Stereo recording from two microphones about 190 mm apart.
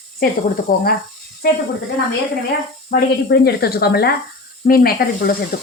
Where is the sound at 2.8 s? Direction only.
55° left (ahead or behind).